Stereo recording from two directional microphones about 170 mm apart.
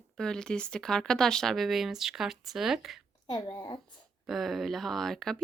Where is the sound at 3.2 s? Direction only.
25° left (ahead or behind).